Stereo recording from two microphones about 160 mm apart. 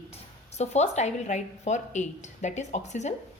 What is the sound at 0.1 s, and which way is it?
Speech, 45° left (ahead or behind).